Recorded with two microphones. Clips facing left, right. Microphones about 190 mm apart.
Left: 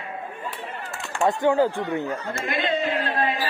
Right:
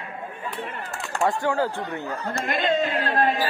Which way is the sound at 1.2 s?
20° left (ahead or behind).